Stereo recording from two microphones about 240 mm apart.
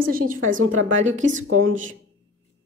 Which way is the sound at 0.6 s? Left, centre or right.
Right.